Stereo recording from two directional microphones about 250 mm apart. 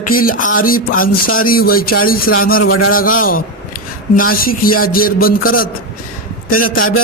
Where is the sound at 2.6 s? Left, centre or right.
Left.